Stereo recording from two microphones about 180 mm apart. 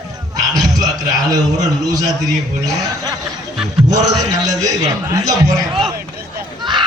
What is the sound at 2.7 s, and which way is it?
A man's voice, 20° right (ahead or behind).